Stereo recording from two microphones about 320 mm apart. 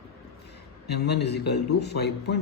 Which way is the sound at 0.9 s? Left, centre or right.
Left.